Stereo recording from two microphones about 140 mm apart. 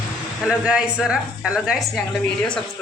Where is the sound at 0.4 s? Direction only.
5° right (ahead or behind).